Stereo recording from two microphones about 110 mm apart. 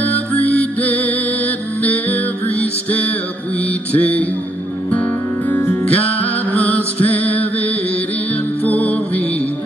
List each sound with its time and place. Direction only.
0.5 s music: 15° left (ahead or behind)
8.6 s music: 15° left (ahead or behind)